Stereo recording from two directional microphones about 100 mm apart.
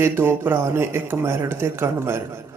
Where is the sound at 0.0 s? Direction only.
25° right (ahead or behind).